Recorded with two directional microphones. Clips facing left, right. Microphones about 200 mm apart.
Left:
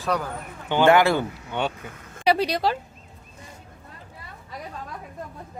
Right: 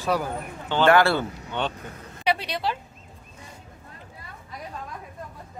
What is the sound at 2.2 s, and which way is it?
Speech, 40° left (ahead or behind).